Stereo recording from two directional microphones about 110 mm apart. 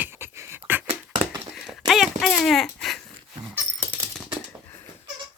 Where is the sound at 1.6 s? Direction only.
Centre (ahead or behind).